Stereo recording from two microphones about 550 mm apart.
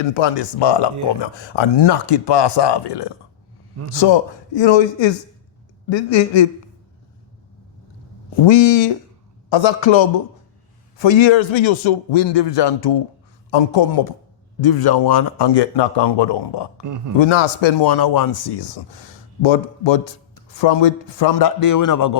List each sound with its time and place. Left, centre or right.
0.1 s a man's voice: left
8.4 s a man's voice: left
17.2 s a man's voice: left
19.4 s a man's voice: left